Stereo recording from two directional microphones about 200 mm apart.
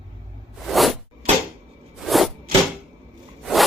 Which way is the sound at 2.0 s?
Centre (ahead or behind).